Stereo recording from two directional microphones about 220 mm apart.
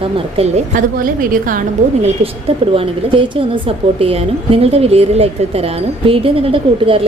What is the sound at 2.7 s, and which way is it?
Speech, 25° right (ahead or behind).